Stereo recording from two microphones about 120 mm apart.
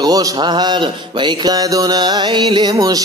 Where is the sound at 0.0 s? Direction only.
35° right (ahead or behind).